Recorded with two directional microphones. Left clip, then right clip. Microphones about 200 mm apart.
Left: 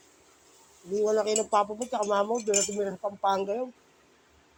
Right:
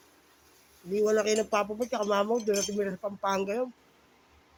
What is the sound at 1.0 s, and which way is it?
Speech, 25° right (ahead or behind).